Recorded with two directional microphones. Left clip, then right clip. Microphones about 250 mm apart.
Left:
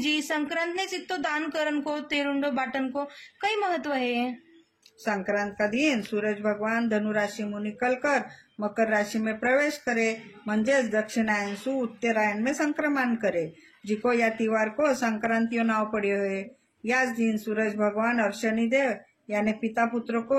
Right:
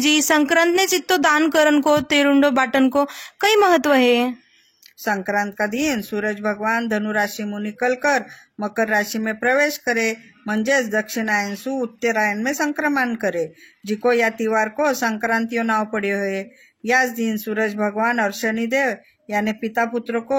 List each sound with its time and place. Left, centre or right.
0.0 s speech: right